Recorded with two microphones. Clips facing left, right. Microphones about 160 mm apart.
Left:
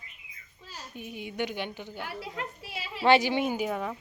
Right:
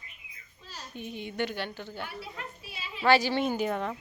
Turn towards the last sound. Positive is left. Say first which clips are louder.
# right 1 dB
turn(degrees=5)  # may be behind; listen again after turning